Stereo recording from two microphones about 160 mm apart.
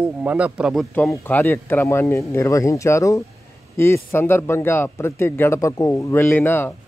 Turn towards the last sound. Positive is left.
turn(degrees=15)  # may be behind; listen again after turning